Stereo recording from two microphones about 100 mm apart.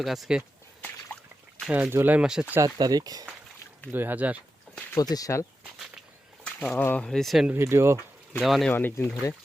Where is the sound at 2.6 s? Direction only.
40° right (ahead or behind).